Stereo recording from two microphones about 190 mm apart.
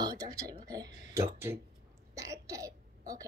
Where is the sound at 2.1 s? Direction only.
15° right (ahead or behind).